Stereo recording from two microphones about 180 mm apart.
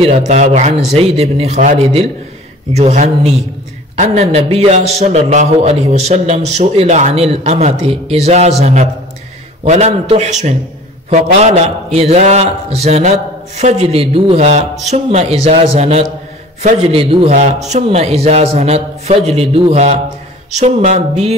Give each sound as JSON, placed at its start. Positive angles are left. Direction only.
{"t": 0.3, "sound": "a man's voice", "side_deg": -40}